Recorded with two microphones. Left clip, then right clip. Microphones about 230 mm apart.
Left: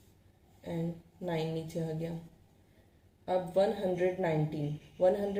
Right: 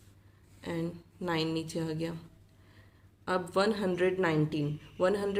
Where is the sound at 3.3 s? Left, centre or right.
Right.